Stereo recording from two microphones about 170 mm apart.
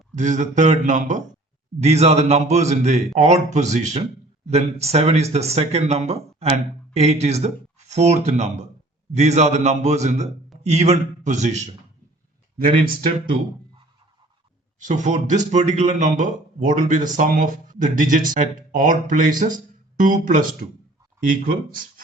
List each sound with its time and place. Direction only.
0.2 s speech: 45° right (ahead or behind)
12.5 s speech: 60° right (ahead or behind)
14.8 s speech: 45° right (ahead or behind)